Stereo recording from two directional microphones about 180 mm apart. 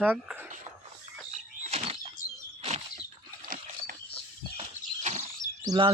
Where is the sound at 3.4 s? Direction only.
50° right (ahead or behind).